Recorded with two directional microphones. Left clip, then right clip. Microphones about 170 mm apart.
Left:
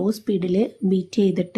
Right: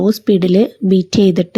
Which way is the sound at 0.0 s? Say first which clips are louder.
Right 10 dB; 30° right (ahead or behind).